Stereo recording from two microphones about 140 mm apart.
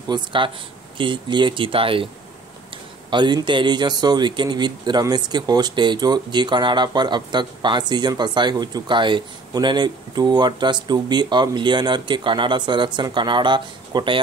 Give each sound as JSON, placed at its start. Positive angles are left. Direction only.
{"t": 0.1, "sound": "speech", "side_deg": -35}
{"t": 3.1, "sound": "speech", "side_deg": -35}